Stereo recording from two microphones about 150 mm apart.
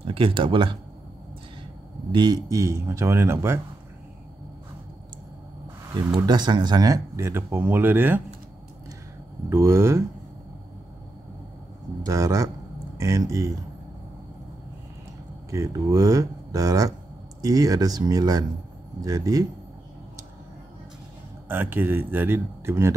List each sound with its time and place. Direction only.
0.0 s speech: 35° right (ahead or behind)
2.1 s a man's voice: 25° right (ahead or behind)
5.9 s a sound: 25° right (ahead or behind)
6.2 s speech: 30° right (ahead or behind)
9.5 s speech: 20° right (ahead or behind)
12.0 s a man's voice: 20° right (ahead or behind)
15.5 s a man's voice: 20° right (ahead or behind)
21.5 s speech: 15° right (ahead or behind)